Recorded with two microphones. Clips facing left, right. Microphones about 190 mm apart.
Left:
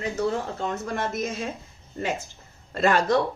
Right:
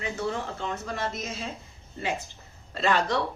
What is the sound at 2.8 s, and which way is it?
Speech, 45° left (ahead or behind).